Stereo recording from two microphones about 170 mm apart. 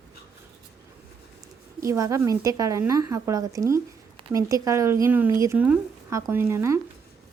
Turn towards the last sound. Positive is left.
turn(degrees=-15)  # may be behind; listen again after turning